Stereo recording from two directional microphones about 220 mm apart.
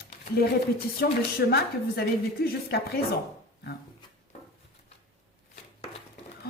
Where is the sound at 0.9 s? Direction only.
45° left (ahead or behind).